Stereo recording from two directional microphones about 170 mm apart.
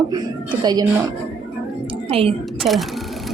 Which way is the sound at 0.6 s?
25° right (ahead or behind).